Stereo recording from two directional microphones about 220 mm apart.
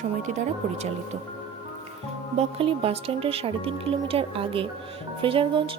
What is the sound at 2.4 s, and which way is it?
A woman's voice, 25° right (ahead or behind).